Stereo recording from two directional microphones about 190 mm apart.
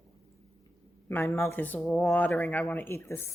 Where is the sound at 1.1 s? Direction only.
10° left (ahead or behind).